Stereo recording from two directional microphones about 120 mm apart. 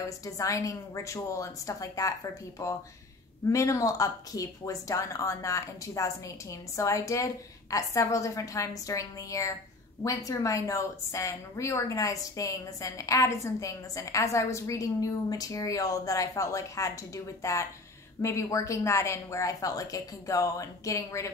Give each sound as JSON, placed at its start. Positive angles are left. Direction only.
{"t": 0.2, "sound": "a woman's voice", "side_deg": 25}